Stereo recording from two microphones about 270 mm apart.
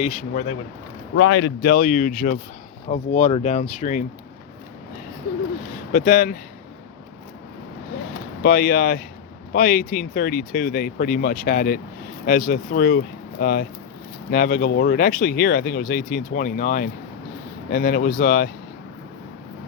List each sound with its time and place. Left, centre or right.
0.0 s speech: left
1.1 s speech: left
5.9 s speech: left
8.4 s speech: left